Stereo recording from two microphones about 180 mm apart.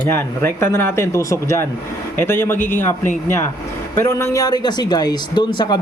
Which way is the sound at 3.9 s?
15° left (ahead or behind).